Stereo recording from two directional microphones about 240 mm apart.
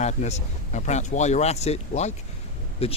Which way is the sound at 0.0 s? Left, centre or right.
Left.